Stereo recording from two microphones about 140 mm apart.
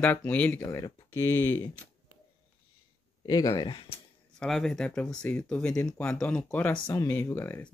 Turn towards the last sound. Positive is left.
turn(degrees=15)  # may be behind; listen again after turning